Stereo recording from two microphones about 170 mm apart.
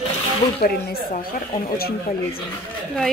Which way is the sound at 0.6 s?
55° left (ahead or behind).